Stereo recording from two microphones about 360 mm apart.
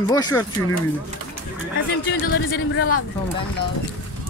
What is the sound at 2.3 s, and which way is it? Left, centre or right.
Speech, left.